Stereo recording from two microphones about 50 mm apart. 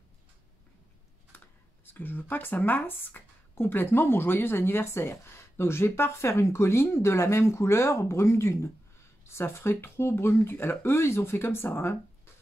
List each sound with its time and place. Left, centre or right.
1.3 s computer keyboard: left
2.0 s speech: left
9.2 s speech: left